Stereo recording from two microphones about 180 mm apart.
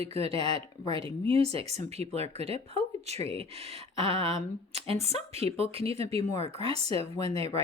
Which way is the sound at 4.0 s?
30° right (ahead or behind).